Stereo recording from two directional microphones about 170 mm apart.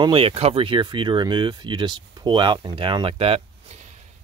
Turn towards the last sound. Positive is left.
turn(degrees=-30)  # may be behind; listen again after turning